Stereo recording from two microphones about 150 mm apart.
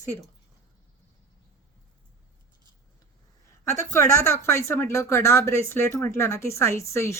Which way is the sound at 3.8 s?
20° left (ahead or behind).